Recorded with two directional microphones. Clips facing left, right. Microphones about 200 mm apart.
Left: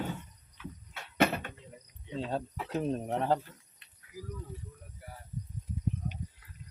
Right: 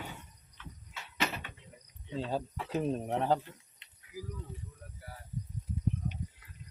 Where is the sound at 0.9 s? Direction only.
55° left (ahead or behind).